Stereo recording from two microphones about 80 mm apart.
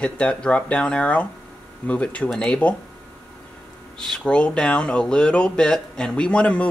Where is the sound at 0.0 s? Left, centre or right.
Centre.